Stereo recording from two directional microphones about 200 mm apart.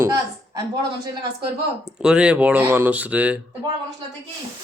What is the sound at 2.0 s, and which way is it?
Speech, 5° right (ahead or behind).